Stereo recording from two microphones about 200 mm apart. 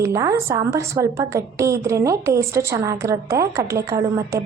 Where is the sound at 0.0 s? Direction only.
15° right (ahead or behind).